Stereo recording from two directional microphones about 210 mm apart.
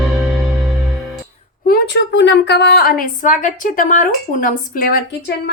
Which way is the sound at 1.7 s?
55° left (ahead or behind).